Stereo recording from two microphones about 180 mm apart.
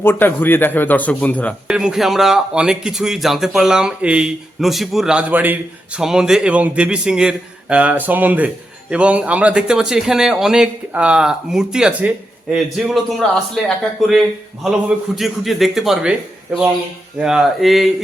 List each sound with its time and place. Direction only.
0.0 s speech: 10° left (ahead or behind)
1.6 s speech: 5° right (ahead or behind)
17.2 s speech: 5° right (ahead or behind)